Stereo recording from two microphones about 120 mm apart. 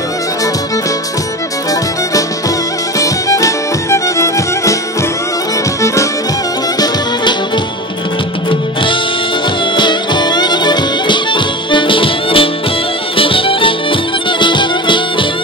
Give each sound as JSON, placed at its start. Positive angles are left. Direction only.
{"t": 3.0, "sound": "music", "side_deg": 30}
{"t": 9.8, "sound": "music", "side_deg": 40}